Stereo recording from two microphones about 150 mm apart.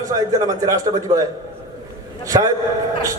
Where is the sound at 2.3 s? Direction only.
25° right (ahead or behind).